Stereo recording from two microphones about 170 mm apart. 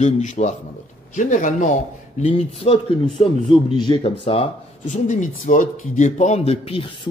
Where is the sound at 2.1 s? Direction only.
35° left (ahead or behind).